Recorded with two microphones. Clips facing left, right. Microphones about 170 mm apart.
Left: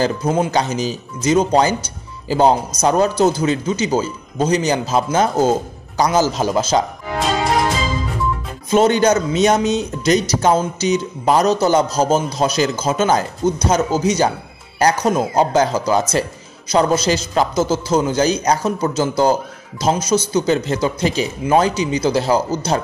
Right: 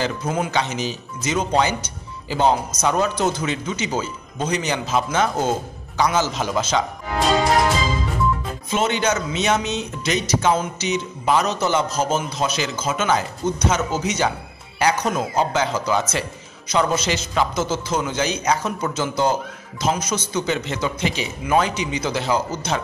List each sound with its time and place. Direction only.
0.0 s a man's voice: 35° left (ahead or behind)
8.6 s a man's voice: 40° left (ahead or behind)